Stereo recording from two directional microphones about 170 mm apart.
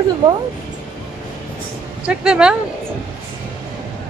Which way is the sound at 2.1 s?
5° right (ahead or behind).